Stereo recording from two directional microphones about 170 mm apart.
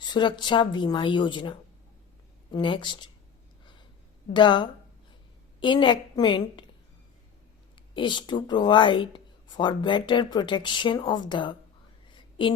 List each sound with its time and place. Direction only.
0.0 s speech: 25° left (ahead or behind)
4.4 s speech: 25° left (ahead or behind)
7.9 s speech: 30° left (ahead or behind)
12.1 s a sound: 30° left (ahead or behind)